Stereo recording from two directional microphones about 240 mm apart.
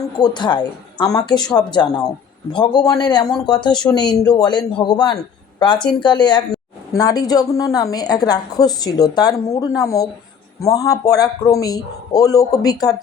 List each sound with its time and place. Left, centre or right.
0.2 s a woman's voice: centre